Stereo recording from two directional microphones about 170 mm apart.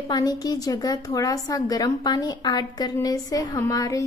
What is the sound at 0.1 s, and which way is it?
A woman's voice, 25° left (ahead or behind).